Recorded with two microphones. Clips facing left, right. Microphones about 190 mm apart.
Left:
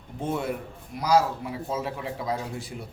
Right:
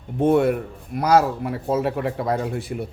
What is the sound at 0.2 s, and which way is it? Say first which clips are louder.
Speech: right 11 dB; 60° right (ahead or behind).